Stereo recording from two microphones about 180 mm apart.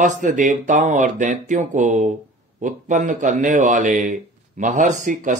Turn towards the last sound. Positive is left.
turn(degrees=-45)  # may be behind; listen again after turning